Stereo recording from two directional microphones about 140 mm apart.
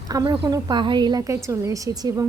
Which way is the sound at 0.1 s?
30° right (ahead or behind).